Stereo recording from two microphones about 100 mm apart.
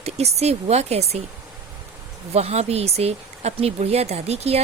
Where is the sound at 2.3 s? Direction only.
90° right.